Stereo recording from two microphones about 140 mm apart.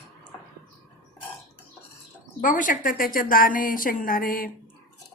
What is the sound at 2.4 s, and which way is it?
A woman's voice, 70° left (ahead or behind).